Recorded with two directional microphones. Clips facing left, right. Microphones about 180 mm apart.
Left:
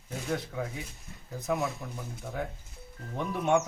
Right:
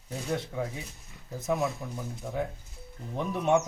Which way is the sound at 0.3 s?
5° right (ahead or behind).